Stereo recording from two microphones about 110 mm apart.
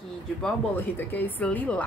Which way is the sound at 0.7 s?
20° left (ahead or behind).